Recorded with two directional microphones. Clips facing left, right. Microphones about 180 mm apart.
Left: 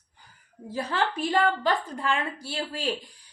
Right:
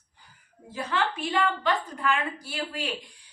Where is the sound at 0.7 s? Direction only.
35° left (ahead or behind).